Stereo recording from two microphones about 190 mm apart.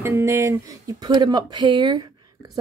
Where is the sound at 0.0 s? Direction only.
15° right (ahead or behind).